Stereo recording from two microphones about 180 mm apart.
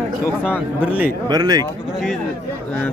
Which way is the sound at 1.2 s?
20° right (ahead or behind).